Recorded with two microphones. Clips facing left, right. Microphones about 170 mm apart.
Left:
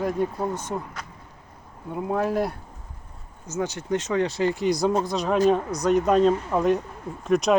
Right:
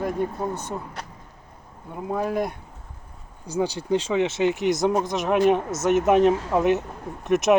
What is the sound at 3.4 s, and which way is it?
Speech, 35° right (ahead or behind).